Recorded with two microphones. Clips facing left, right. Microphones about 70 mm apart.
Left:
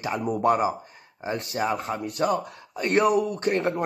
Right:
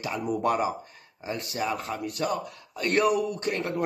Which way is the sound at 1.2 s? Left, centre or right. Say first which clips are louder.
Left 3 dB; left.